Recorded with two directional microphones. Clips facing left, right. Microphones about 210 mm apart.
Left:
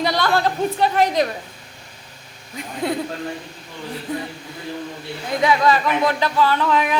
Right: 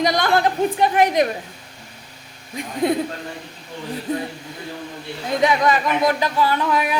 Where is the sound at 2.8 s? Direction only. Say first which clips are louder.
Right 4 dB; 20° right (ahead or behind).